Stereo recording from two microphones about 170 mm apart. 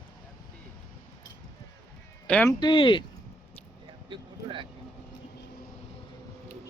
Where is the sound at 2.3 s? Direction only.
5° left (ahead or behind).